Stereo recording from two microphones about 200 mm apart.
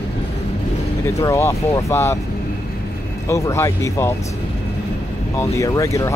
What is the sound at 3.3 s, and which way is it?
Speech, 15° left (ahead or behind).